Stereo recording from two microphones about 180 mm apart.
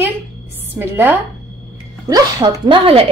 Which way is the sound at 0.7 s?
10° right (ahead or behind).